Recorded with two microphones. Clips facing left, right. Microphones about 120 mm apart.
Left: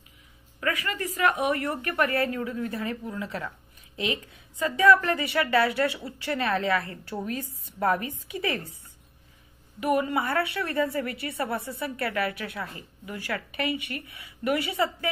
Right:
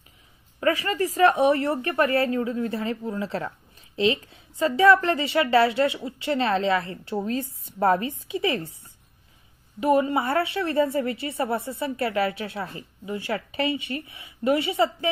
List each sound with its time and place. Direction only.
0.6 s a woman's voice: 30° right (ahead or behind)
9.8 s a woman's voice: 25° right (ahead or behind)